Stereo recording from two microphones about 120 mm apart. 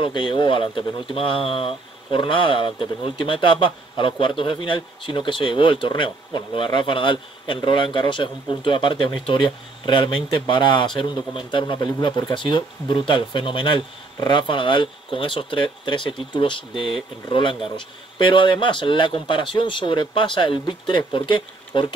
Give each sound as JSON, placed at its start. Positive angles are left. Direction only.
{"t": 0.0, "sound": "speech", "side_deg": 45}